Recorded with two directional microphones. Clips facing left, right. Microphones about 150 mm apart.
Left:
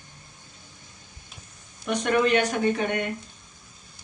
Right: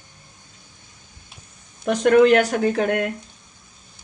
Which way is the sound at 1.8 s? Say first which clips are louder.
Right 8 dB; 90° right.